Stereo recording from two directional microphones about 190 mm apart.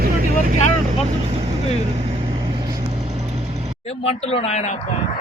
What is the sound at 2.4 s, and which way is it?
Vehicle, 20° right (ahead or behind).